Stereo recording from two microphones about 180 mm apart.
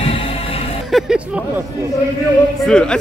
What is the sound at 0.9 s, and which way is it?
Speech, 5° right (ahead or behind).